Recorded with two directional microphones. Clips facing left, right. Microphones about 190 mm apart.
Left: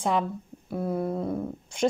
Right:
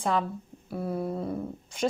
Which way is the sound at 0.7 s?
5° right (ahead or behind).